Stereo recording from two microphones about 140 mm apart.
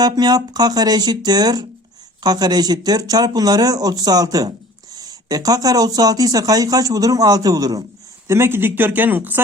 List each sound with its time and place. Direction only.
0.0 s speech: 30° right (ahead or behind); by 9.4 s 15° right (ahead or behind)